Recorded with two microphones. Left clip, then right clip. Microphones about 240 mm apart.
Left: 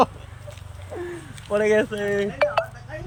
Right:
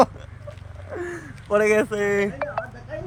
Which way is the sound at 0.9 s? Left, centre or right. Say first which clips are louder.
Right 1 dB; right.